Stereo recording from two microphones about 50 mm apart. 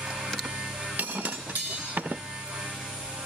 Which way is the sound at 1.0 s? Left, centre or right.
Right.